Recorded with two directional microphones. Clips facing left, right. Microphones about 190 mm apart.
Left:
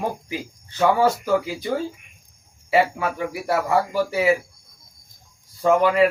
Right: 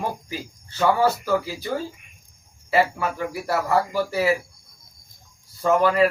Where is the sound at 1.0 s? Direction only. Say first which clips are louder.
Left 1 dB; 15° left (ahead or behind).